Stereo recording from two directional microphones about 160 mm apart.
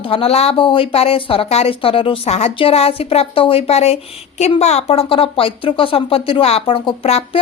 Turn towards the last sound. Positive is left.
turn(degrees=35)  # may be behind; listen again after turning